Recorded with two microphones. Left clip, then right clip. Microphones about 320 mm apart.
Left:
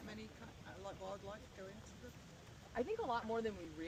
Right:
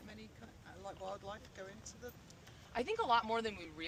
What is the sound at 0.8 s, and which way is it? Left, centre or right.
Speech, centre.